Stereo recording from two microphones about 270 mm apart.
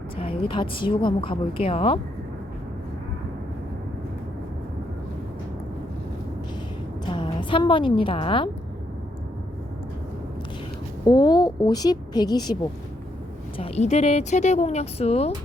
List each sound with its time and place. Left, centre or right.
0.2 s a woman's voice: centre
7.0 s a woman's voice: centre
11.0 s a woman's voice: centre
13.6 s a woman's voice: left